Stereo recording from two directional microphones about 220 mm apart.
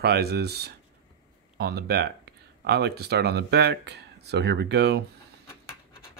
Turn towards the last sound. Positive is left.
turn(degrees=-50)  # may be behind; listen again after turning